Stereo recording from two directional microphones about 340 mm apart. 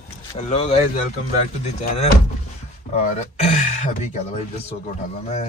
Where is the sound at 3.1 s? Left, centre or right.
Centre.